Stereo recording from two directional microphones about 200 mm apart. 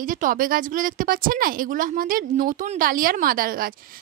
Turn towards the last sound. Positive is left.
turn(degrees=-45)  # may be behind; listen again after turning